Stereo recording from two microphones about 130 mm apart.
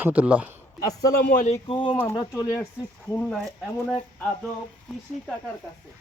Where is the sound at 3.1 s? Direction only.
5° left (ahead or behind).